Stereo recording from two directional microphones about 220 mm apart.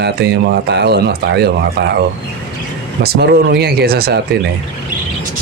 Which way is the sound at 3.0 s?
45° right (ahead or behind).